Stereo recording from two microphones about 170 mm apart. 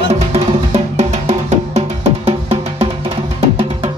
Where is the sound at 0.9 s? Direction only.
40° right (ahead or behind).